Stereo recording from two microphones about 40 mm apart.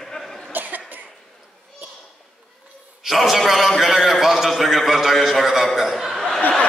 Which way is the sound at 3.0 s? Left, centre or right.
Centre.